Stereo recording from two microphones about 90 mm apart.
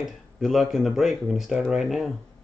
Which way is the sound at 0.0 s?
5° right (ahead or behind).